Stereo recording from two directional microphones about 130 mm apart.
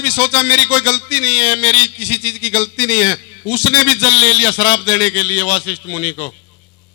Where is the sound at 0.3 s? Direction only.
20° left (ahead or behind).